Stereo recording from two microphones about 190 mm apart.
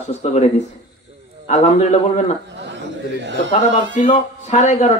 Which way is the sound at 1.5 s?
35° left (ahead or behind).